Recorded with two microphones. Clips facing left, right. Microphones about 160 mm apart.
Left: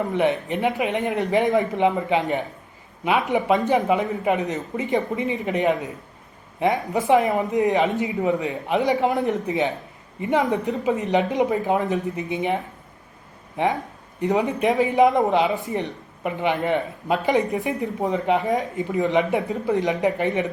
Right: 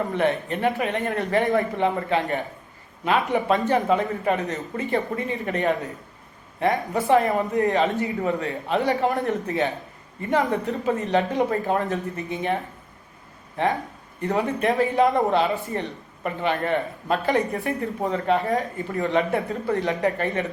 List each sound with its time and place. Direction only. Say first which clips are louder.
0.1 s speech: left 2 dB; 15° left (ahead or behind)
13.6 s speech: left 1 dB; 15° left (ahead or behind)